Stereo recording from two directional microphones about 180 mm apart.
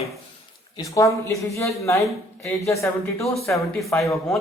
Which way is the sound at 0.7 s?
20° left (ahead or behind).